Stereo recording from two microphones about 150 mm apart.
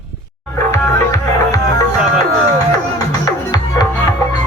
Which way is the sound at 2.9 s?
25° left (ahead or behind).